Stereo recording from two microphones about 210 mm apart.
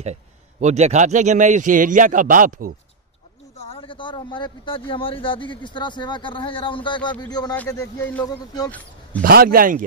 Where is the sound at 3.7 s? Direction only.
25° left (ahead or behind); by 8.2 s 10° left (ahead or behind).